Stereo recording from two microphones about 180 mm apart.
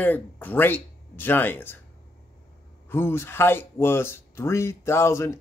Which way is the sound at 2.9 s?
15° left (ahead or behind).